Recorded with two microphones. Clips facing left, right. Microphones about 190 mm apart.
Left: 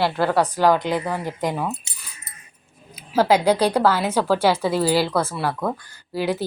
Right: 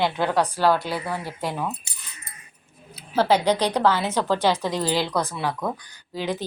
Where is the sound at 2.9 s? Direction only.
10° left (ahead or behind).